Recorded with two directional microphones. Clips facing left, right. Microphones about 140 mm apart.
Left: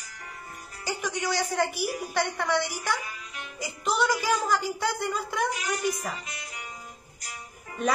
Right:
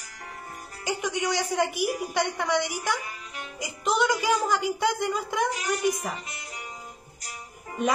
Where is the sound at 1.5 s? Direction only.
15° right (ahead or behind).